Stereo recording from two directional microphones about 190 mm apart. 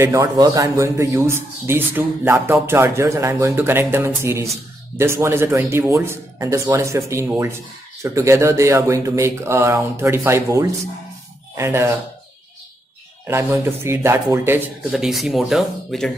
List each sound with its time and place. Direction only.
0.0 s speech: 15° right (ahead or behind)
13.3 s speech: 15° right (ahead or behind)